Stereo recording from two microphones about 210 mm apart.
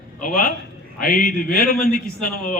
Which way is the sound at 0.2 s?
40° left (ahead or behind).